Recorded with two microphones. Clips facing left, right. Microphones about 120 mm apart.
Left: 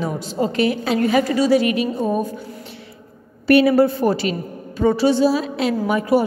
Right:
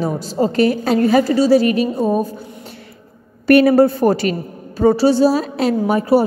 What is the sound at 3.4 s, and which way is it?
A woman's voice, 50° right (ahead or behind).